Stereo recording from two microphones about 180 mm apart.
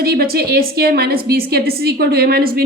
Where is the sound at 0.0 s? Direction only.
60° right (ahead or behind).